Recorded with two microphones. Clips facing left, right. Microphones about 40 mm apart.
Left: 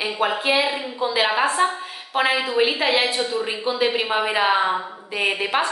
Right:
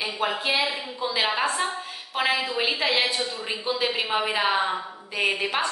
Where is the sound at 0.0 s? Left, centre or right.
Centre.